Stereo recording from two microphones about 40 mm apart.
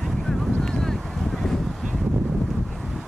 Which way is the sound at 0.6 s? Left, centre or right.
Centre.